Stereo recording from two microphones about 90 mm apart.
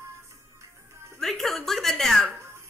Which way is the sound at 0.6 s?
30° right (ahead or behind).